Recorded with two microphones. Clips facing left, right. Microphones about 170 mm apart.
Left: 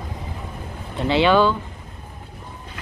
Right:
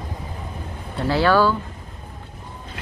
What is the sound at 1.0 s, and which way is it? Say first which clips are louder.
Speech: left 1 dB; 20° left (ahead or behind).